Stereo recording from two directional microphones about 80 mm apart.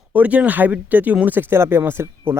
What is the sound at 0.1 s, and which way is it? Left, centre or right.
Speech, centre.